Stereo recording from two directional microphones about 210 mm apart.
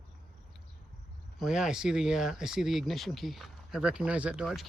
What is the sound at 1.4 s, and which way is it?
Speech, centre (ahead or behind).